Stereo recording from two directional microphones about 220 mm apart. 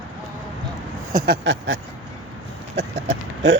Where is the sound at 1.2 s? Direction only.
50° right (ahead or behind).